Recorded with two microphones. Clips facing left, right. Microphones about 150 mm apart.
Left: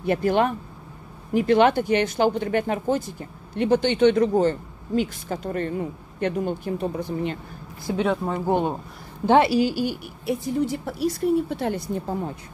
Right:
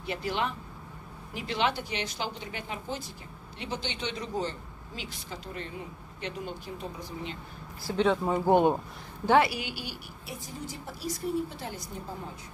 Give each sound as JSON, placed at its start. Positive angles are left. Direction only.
{"t": 0.0, "sound": "speech", "side_deg": 50}
{"t": 7.8, "sound": "speech", "side_deg": 10}
{"t": 8.3, "sound": "speech", "side_deg": -15}
{"t": 9.2, "sound": "a woman's voice", "side_deg": 25}
{"t": 10.2, "sound": "a woman's voice", "side_deg": 65}